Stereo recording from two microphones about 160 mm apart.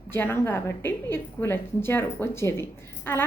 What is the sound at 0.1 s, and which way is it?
A woman's voice, 15° left (ahead or behind).